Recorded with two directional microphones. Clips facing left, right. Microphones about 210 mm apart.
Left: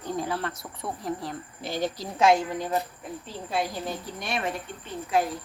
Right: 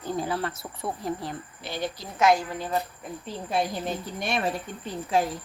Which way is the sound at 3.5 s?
20° right (ahead or behind).